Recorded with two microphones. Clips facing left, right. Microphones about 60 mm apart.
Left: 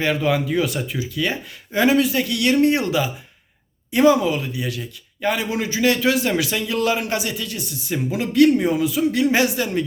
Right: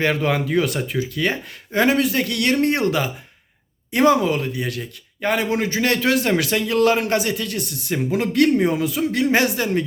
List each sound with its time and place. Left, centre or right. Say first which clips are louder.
0.0 s a man's voice: even; right